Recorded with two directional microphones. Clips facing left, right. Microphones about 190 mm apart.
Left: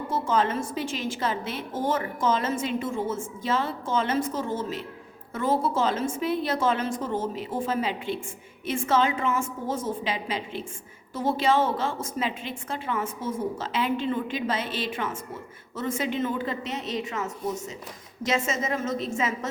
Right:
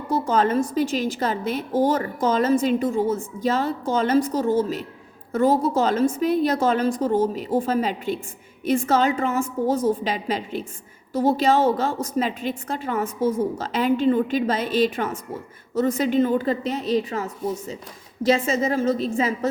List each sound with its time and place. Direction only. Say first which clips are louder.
0.1 s a woman's voice: right 5 dB; 40° right (ahead or behind)